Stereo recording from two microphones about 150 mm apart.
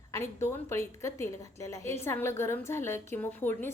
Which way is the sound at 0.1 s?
15° left (ahead or behind).